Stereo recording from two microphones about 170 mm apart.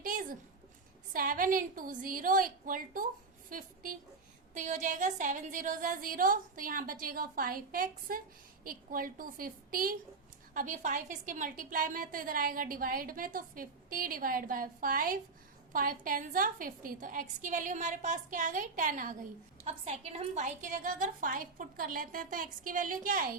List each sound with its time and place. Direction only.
0.0 s a sound: 50° right (ahead or behind)
1.1 s a woman's voice: 55° right (ahead or behind)
19.6 s a woman's voice: 40° right (ahead or behind); by 23.4 s 55° right (ahead or behind)